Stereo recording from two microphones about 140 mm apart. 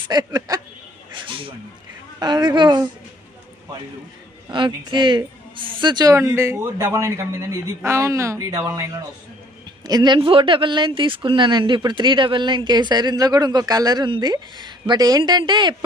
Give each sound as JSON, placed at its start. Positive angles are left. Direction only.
{"t": 0.1, "sound": "speech", "side_deg": -30}
{"t": 1.2, "sound": "snake", "side_deg": -40}
{"t": 2.1, "sound": "speech", "side_deg": -30}
{"t": 4.5, "sound": "speech", "side_deg": -35}
{"t": 9.8, "sound": "speech", "side_deg": -30}